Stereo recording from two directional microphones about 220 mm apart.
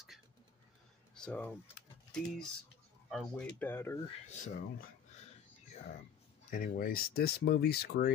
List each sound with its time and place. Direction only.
1.1 s typing: 5° left (ahead or behind)
3.1 s speech: 5° left (ahead or behind)
4.3 s speech: 35° left (ahead or behind)
6.5 s speech: 40° left (ahead or behind)